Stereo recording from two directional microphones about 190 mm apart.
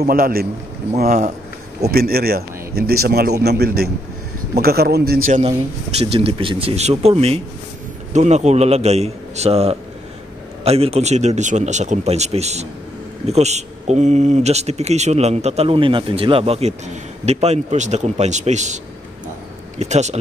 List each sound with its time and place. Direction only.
0.0 s speech: 50° right (ahead or behind)
1.8 s a man's voice: 55° right (ahead or behind)
5.9 s speech: 30° right (ahead or behind)
19.8 s speech: 35° right (ahead or behind)